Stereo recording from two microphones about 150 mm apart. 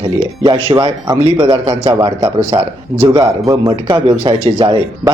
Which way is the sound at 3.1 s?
25° right (ahead or behind).